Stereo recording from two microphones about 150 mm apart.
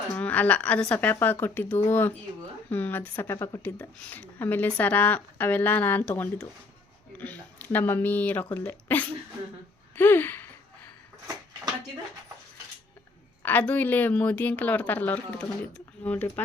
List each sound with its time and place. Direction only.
0.1 s speech: 10° left (ahead or behind)
9.9 s a sound: 15° left (ahead or behind)
13.4 s speech: 10° left (ahead or behind)